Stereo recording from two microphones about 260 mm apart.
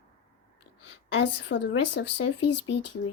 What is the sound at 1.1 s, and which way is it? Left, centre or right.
Speech, left.